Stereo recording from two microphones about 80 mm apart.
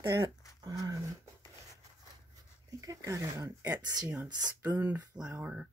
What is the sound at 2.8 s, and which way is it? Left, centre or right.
Speech, right.